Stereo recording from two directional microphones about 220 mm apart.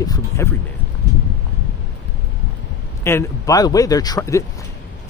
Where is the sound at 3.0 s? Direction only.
15° left (ahead or behind).